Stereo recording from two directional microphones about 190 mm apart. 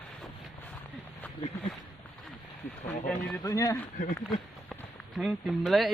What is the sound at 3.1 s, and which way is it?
Speech, 5° left (ahead or behind).